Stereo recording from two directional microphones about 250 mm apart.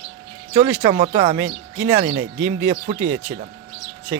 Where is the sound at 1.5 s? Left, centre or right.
Right.